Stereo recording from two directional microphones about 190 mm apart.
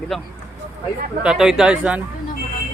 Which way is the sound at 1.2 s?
5° right (ahead or behind).